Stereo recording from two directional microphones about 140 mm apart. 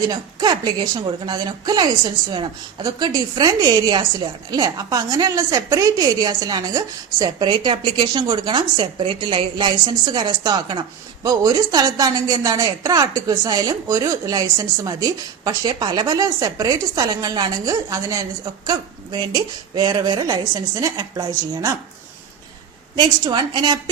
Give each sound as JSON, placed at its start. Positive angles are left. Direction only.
{"t": 0.1, "sound": "a woman's voice", "side_deg": -30}
{"t": 23.0, "sound": "a woman's voice", "side_deg": -30}